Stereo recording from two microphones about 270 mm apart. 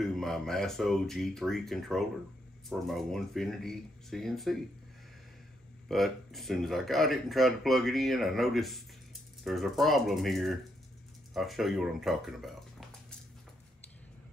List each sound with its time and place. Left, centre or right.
0.0 s speech: centre
5.9 s speech: centre